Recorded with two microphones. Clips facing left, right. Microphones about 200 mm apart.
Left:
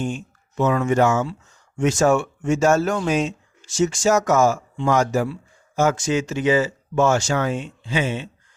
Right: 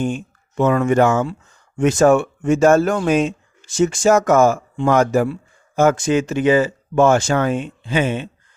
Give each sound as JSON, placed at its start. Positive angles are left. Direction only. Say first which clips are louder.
{"t": 0.0, "sound": "speech", "louder": "right 4 dB", "side_deg": -55}